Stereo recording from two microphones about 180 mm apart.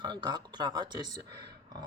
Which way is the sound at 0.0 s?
25° right (ahead or behind).